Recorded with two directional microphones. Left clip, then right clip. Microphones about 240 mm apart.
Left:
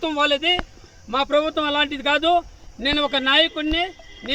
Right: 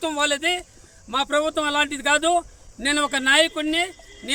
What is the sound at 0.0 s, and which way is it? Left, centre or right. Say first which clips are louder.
Speech: left 2 dB; centre.